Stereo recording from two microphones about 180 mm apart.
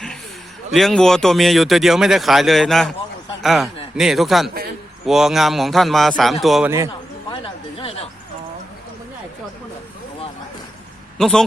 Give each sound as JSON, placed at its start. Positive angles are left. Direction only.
{"t": 0.7, "sound": "a man's voice", "side_deg": 0}
{"t": 7.3, "sound": "a sound", "side_deg": 30}
{"t": 11.2, "sound": "speech", "side_deg": 0}